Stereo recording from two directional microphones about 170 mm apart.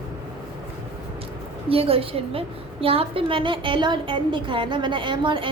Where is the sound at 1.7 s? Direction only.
35° right (ahead or behind).